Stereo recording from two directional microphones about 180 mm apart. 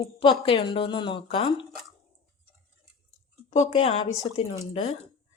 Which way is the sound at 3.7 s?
25° left (ahead or behind).